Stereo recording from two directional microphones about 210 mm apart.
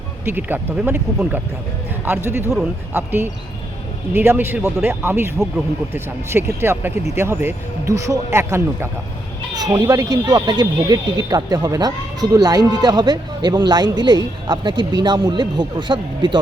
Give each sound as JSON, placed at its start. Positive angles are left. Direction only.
{"t": 0.3, "sound": "speech", "side_deg": -10}